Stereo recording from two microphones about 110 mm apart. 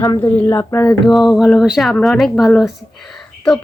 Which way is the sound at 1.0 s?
Centre (ahead or behind).